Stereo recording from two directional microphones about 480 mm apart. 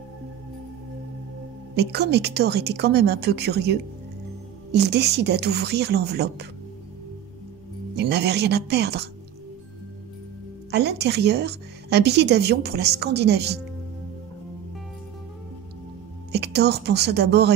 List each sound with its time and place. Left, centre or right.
1.8 s a woman's voice: right
7.9 s a woman's voice: right
10.7 s a woman's voice: right
16.3 s a woman's voice: right